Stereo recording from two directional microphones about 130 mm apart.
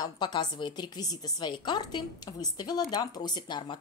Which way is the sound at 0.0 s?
35° left (ahead or behind).